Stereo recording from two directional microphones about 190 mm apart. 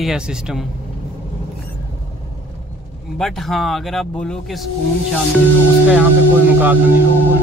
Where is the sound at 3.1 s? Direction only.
Centre (ahead or behind).